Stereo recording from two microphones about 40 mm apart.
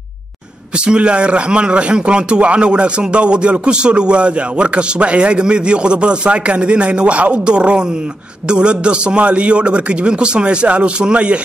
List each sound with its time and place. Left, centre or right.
0.8 s a man's voice: right